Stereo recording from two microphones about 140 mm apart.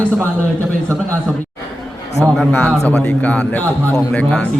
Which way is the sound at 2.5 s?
10° left (ahead or behind).